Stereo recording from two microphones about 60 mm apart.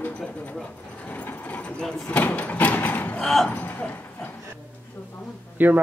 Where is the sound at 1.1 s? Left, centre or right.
Left.